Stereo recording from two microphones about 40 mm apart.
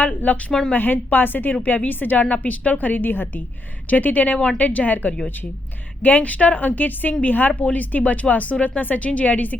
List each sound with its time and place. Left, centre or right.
0.0 s a woman's voice: left
0.7 s a woman's voice: left
3.8 s a woman's voice: left